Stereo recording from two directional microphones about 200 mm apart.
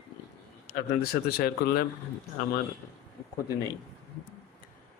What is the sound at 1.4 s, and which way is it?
Speech, 50° left (ahead or behind).